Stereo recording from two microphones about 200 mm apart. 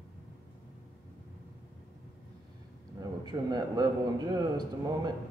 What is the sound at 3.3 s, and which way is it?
Speech, 20° right (ahead or behind).